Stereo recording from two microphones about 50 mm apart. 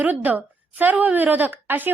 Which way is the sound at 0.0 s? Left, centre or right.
Right.